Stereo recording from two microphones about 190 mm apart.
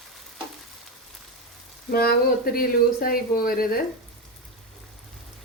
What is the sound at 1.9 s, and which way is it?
Speech, 55° left (ahead or behind).